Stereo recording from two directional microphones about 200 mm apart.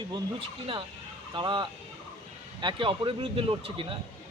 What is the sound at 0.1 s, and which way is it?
Speech, 25° right (ahead or behind).